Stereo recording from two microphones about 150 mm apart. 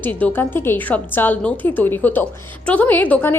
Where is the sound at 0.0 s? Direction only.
10° left (ahead or behind).